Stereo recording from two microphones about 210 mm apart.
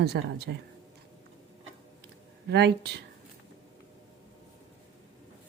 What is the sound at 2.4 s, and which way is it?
Speech, 55° right (ahead or behind).